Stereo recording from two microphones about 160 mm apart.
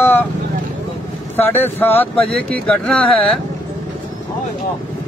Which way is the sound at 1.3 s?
10° left (ahead or behind).